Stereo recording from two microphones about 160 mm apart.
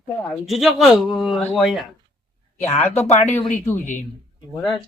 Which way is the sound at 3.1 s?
45° left (ahead or behind).